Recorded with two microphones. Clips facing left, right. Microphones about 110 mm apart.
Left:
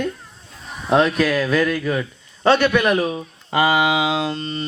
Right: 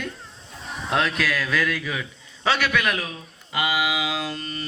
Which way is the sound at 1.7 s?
40° left (ahead or behind).